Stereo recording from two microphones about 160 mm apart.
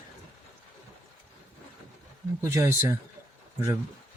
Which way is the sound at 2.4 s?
20° right (ahead or behind).